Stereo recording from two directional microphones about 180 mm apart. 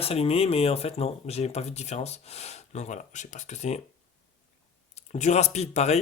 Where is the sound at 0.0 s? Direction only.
35° left (ahead or behind).